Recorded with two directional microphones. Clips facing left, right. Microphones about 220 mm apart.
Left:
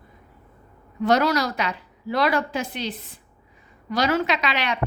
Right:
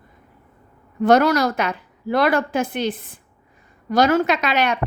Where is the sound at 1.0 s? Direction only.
50° right (ahead or behind).